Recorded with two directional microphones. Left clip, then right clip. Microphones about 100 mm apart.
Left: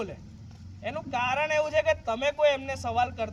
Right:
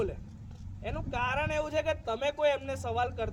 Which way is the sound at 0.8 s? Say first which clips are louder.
Left 4 dB; 45° right (ahead or behind).